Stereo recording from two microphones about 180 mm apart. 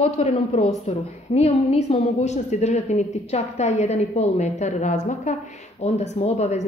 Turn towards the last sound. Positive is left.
turn(degrees=35)  # may be behind; listen again after turning